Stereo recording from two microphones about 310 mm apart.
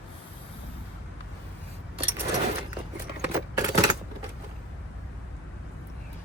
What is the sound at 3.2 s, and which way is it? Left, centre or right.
Keys jangling, centre.